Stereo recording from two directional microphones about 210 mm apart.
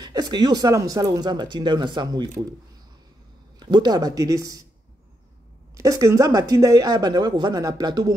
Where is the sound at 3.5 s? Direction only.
20° right (ahead or behind).